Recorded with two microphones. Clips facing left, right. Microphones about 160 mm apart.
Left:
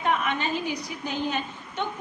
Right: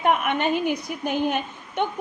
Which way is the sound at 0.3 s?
60° right (ahead or behind).